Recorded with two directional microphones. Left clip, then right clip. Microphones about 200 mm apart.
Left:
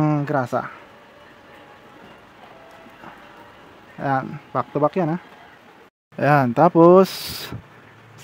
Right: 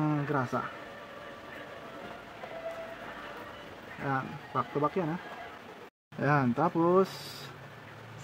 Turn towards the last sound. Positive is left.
turn(degrees=45)  # may be behind; listen again after turning